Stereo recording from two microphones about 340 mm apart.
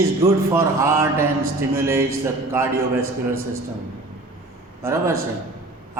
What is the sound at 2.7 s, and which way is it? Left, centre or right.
Speech, right.